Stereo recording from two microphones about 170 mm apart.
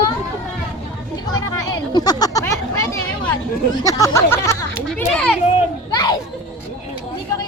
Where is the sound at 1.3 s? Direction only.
20° left (ahead or behind).